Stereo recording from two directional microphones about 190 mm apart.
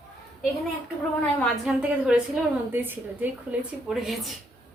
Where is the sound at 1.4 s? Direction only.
5° right (ahead or behind).